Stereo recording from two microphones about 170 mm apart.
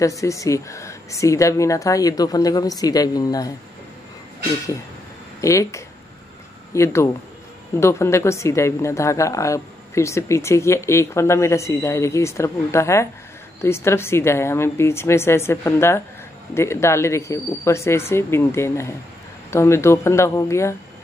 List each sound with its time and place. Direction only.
0.0 s speech: 20° left (ahead or behind)
5.4 s a woman's voice: 15° left (ahead or behind)